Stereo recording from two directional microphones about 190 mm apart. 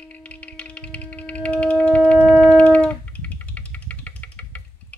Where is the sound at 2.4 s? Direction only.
5° left (ahead or behind).